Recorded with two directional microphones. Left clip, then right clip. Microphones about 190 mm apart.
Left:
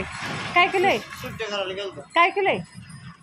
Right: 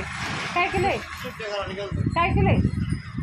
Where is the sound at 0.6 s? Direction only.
25° left (ahead or behind).